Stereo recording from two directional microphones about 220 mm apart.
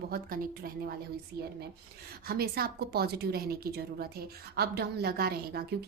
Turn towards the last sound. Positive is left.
turn(degrees=-45)  # may be behind; listen again after turning